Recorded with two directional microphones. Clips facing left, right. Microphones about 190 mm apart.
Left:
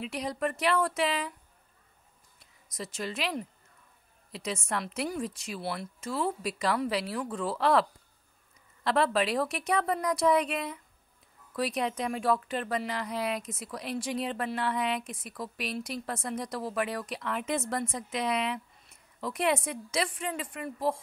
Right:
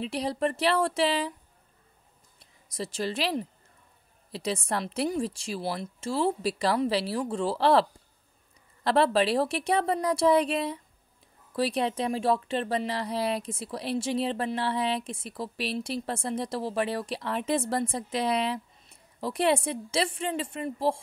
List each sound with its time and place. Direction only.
0.0 s a woman's voice: 30° right (ahead or behind)
2.7 s a woman's voice: 30° right (ahead or behind)
8.8 s a woman's voice: 35° right (ahead or behind)